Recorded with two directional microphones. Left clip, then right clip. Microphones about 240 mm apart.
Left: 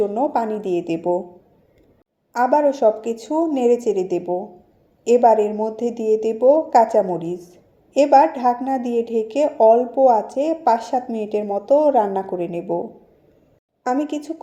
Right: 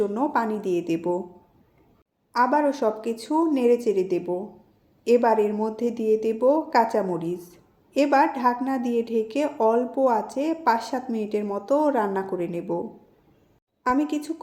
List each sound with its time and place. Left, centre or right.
0.1 s a woman's voice: centre
2.3 s a woman's voice: centre
13.8 s a woman's voice: centre